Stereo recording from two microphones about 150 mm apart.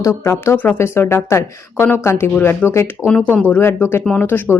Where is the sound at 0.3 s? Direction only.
15° left (ahead or behind).